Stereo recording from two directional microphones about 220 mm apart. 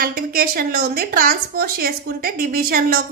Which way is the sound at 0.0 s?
40° right (ahead or behind).